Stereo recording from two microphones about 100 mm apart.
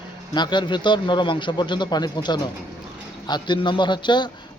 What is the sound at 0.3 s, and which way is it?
Speech, 50° left (ahead or behind).